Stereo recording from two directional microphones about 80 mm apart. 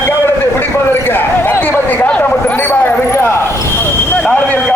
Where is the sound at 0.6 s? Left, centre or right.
Left.